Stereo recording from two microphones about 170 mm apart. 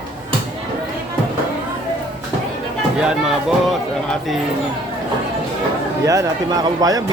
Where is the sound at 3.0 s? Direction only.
5° right (ahead or behind).